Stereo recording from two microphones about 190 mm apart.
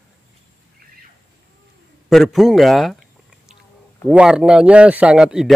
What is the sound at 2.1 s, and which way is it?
Speech, centre (ahead or behind).